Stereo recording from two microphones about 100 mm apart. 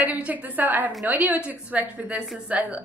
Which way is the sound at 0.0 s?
15° right (ahead or behind).